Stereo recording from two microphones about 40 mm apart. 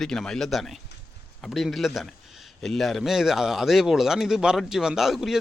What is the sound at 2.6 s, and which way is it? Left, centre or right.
Speech, centre.